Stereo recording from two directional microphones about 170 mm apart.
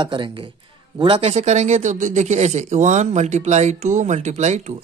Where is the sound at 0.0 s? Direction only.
30° right (ahead or behind).